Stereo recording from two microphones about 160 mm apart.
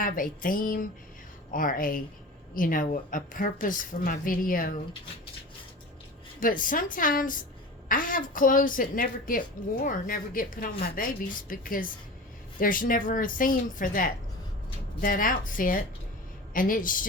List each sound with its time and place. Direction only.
0.0 s a woman's voice: 60° left (ahead or behind)
6.4 s a woman's voice: 60° left (ahead or behind)